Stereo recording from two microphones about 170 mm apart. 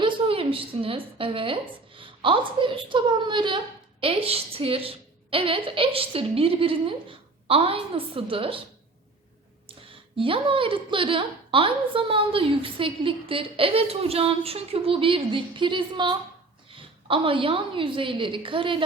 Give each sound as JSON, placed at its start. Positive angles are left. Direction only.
{"t": 0.0, "sound": "a woman's voice", "side_deg": -30}
{"t": 10.2, "sound": "a woman's voice", "side_deg": -30}